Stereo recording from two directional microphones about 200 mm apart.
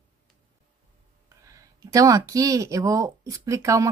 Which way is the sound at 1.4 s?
15° right (ahead or behind).